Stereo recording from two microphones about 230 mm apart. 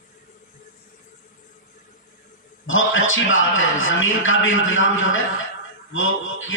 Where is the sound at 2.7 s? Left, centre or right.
Left.